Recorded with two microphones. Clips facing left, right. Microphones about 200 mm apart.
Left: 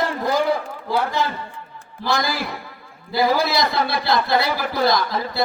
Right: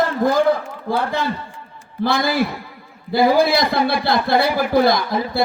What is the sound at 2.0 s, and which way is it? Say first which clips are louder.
Speech: right 5 dB; 55° right (ahead or behind).